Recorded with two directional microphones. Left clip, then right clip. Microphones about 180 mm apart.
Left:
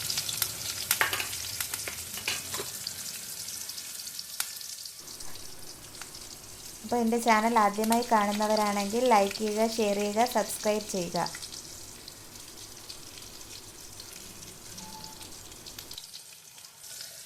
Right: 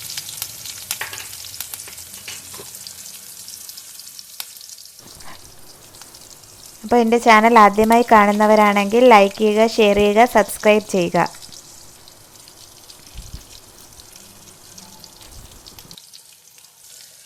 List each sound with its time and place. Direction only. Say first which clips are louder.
6.9 s speech: right 13 dB; 45° right (ahead or behind)
7.4 s speech: right 14 dB; 55° right (ahead or behind)